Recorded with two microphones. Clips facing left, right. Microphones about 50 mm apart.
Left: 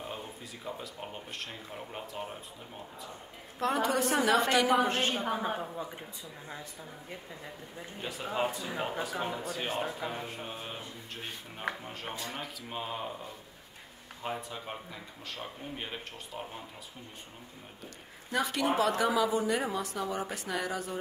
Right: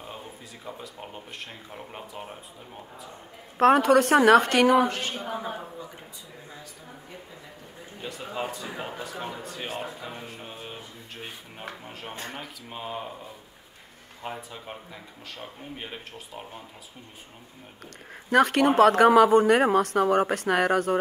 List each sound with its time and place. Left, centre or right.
0.7 s speech: centre
3.5 s a woman's voice: right
4.8 s a woman's voice: left
5.1 s a woman's voice: centre
8.0 s speech: centre
11.1 s speech: centre
14.2 s speech: centre
18.3 s speech: right